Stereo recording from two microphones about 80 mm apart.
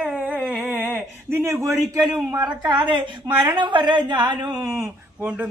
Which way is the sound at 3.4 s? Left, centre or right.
Right.